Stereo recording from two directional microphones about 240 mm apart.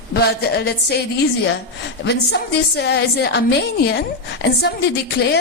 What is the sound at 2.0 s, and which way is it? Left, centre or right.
A woman's voice, left.